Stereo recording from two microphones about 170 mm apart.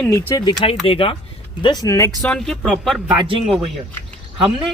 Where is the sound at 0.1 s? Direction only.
20° left (ahead or behind).